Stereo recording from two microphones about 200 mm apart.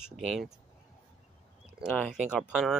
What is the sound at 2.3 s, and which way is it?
Speech, 5° right (ahead or behind).